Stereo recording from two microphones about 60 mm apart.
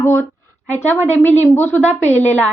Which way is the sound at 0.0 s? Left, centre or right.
Left.